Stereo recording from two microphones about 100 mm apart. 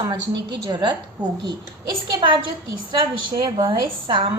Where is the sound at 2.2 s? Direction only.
55° right (ahead or behind).